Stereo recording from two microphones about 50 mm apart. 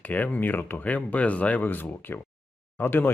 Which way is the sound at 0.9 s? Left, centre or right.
Left.